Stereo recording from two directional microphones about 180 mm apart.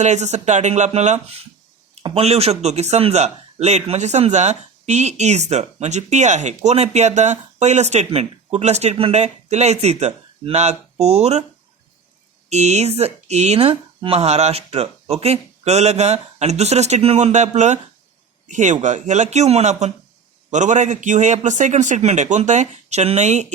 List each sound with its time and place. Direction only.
0.0 s speech: 40° right (ahead or behind)
12.5 s speech: 40° right (ahead or behind)